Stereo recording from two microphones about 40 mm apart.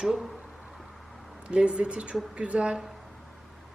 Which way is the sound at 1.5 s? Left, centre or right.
Right.